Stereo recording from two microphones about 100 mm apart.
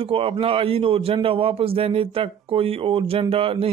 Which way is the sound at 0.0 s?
70° right (ahead or behind).